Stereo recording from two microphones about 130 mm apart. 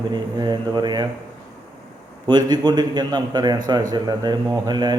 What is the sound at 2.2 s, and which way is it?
Speech, 35° right (ahead or behind).